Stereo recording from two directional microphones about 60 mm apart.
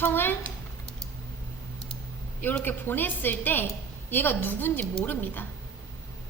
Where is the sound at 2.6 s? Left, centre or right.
Left.